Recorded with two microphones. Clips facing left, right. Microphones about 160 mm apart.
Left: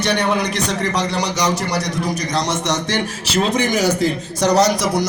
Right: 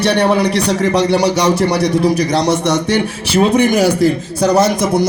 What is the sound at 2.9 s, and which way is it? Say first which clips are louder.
A man's voice: right 6 dB; 55° right (ahead or behind).